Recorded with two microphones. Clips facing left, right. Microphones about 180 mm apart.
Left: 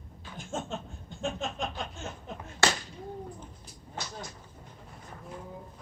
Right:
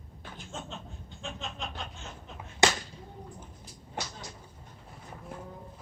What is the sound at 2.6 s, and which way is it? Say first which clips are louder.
Whip: right 2 dB; 15° right (ahead or behind).